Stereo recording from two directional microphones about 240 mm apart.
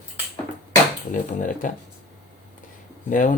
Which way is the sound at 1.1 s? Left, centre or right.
Left.